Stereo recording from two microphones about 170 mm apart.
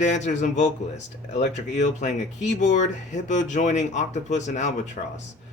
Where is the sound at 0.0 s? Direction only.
45° left (ahead or behind).